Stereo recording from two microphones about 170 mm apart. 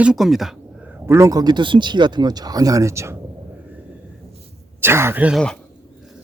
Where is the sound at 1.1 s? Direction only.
15° right (ahead or behind).